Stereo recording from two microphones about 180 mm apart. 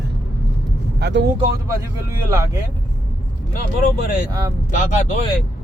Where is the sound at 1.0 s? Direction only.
70° right (ahead or behind).